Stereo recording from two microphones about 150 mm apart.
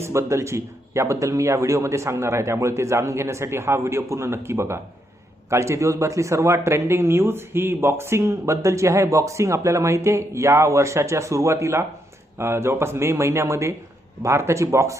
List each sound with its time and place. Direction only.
0.0 s speech: 20° right (ahead or behind)